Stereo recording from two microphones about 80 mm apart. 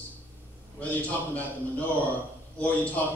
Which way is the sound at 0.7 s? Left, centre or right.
Centre.